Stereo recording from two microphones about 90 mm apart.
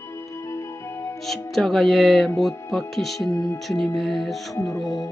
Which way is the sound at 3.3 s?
45° left (ahead or behind).